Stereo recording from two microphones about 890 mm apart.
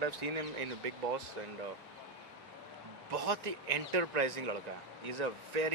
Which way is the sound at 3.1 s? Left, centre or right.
Right.